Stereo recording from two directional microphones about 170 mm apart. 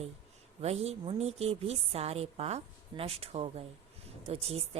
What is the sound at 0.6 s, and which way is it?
A woman's voice, 40° right (ahead or behind).